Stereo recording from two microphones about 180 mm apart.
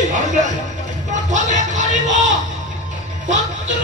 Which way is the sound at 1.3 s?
45° right (ahead or behind).